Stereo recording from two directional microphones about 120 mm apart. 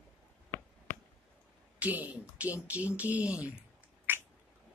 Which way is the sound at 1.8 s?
15° right (ahead or behind).